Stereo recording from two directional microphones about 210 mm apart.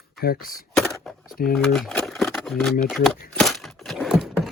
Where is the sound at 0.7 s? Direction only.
5° left (ahead or behind).